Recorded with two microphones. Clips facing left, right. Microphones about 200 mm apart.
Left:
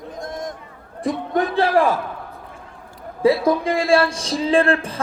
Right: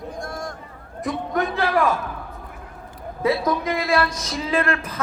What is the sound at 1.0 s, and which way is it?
Speech, 30° left (ahead or behind).